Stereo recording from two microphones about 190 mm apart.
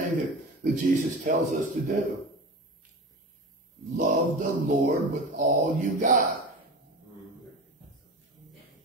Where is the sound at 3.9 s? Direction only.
45° right (ahead or behind).